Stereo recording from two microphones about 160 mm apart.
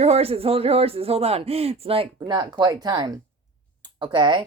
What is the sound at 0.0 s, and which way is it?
Speech, 40° right (ahead or behind).